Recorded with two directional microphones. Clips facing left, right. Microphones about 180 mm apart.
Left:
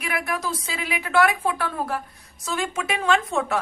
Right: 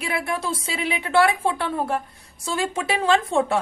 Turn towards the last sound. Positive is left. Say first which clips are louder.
# right 3 dB
turn(degrees=-30)  # may be behind; listen again after turning